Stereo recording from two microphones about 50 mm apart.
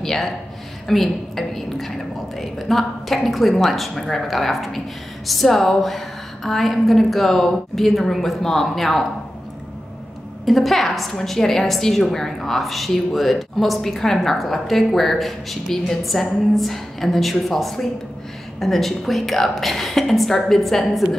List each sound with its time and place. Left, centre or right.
0.0 s a woman's voice: centre
10.4 s a woman's voice: centre